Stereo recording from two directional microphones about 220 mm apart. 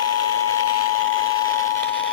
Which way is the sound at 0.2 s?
90° left.